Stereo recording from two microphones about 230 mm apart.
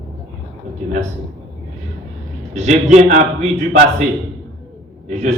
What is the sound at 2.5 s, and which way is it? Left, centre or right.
A man's voice, right.